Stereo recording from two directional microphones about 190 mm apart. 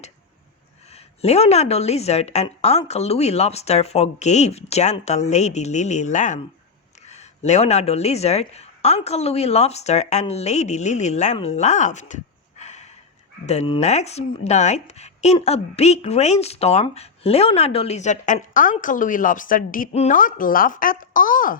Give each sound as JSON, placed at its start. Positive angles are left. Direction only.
{"t": 0.9, "sound": "speech", "side_deg": 35}